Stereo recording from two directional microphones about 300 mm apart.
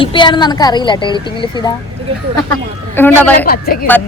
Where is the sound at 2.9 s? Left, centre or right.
Centre.